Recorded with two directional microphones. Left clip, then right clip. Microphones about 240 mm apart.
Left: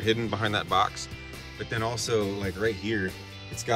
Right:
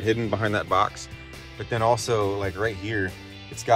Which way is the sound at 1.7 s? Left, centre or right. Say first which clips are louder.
Right 6 dB; centre.